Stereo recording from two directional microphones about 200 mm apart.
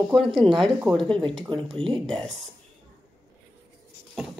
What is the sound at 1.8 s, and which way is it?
Speech, 30° right (ahead or behind).